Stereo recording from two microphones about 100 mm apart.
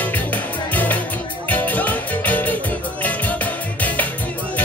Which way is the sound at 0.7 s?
15° left (ahead or behind).